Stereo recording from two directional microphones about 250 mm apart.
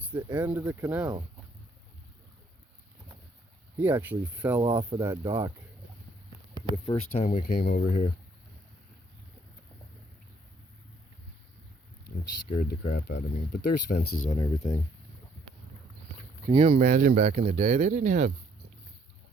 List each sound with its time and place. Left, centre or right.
0.3 s speech: centre
3.8 s speech: centre
6.8 s speech: left
12.5 s speech: left
13.1 s speech: left
13.6 s speech: left
14.3 s speech: centre
16.5 s speech: right